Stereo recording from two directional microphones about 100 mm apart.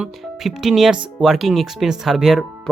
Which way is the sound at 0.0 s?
5° right (ahead or behind).